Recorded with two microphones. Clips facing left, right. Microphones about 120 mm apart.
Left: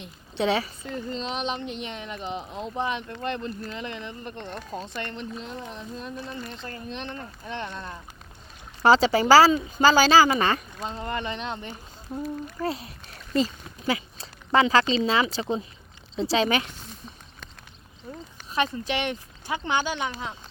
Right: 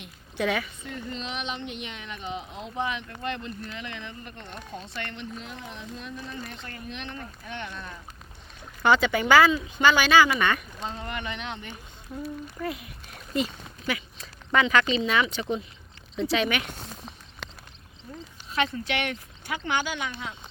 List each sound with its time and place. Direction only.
0.0 s speech: 25° left (ahead or behind)
17.4 s a sound: 90° right
18.9 s speech: 25° left (ahead or behind)